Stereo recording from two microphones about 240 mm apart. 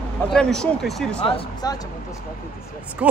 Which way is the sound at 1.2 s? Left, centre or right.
Left.